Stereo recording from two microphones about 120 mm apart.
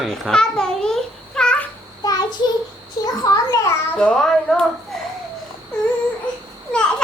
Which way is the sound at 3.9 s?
10° left (ahead or behind).